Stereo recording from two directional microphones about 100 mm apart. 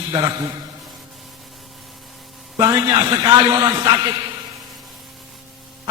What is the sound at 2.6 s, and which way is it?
A man's voice, 40° right (ahead or behind).